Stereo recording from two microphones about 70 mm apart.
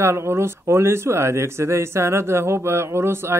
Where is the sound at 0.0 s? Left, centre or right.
Right.